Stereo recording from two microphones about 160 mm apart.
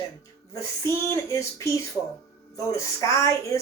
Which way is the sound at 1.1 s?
20° left (ahead or behind).